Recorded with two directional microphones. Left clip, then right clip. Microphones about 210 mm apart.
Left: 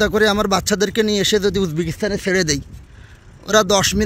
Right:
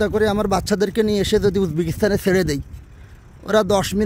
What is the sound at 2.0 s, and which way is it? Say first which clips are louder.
Speech: right 3 dB; 25° right (ahead or behind).